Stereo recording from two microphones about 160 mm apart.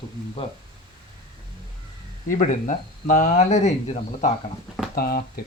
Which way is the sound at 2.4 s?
50° left (ahead or behind).